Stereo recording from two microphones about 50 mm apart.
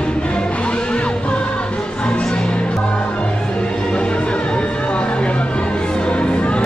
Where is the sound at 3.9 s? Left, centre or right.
Left.